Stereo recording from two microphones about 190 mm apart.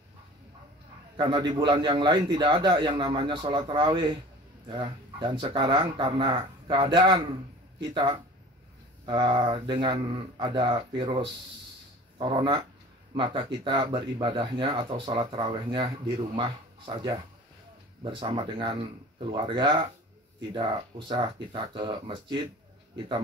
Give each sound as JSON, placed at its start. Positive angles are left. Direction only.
{"t": 1.1, "sound": "a man's voice", "side_deg": -25}
{"t": 21.1, "sound": "speech", "side_deg": -25}